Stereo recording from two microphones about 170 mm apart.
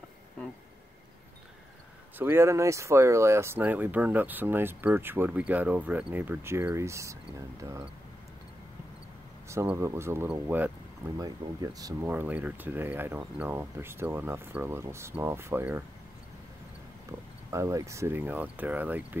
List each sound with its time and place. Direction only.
2.1 s speech: 15° right (ahead or behind)
9.5 s speech: 15° right (ahead or behind)
11.1 s speech: 20° right (ahead or behind)
17.5 s speech: 20° right (ahead or behind)